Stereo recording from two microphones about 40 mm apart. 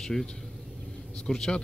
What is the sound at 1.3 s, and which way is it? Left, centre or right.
Speech, centre.